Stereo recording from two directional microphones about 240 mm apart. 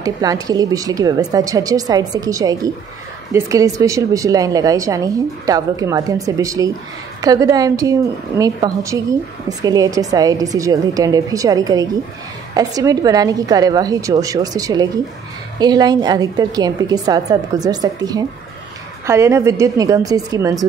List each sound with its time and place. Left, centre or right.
0.0 s a woman's voice: centre